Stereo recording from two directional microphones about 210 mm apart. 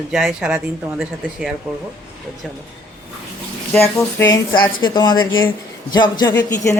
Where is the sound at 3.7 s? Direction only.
10° left (ahead or behind).